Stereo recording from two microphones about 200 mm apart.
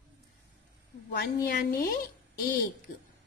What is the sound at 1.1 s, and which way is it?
Speech, 50° left (ahead or behind).